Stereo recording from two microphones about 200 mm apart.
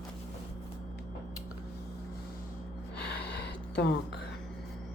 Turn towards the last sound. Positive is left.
turn(degrees=60)  # may be behind; listen again after turning